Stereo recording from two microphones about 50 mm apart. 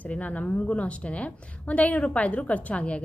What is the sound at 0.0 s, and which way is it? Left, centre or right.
A woman's voice, left.